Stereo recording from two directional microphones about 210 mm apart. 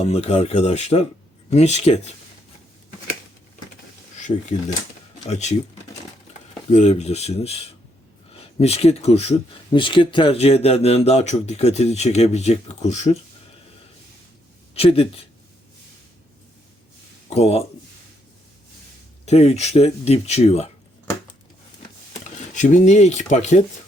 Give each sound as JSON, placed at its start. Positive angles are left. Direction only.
{"t": 0.0, "sound": "speech", "side_deg": 30}
{"t": 5.3, "sound": "speech", "side_deg": 30}
{"t": 6.7, "sound": "speech", "side_deg": 35}
{"t": 14.8, "sound": "speech", "side_deg": 30}
{"t": 17.2, "sound": "speech", "side_deg": 30}
{"t": 19.2, "sound": "speech", "side_deg": 30}
{"t": 22.5, "sound": "speech", "side_deg": 35}